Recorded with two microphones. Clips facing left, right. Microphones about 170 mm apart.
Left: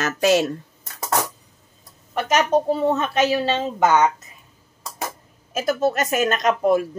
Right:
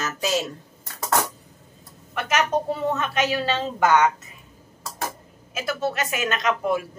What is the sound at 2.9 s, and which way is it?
A woman's voice, 25° left (ahead or behind).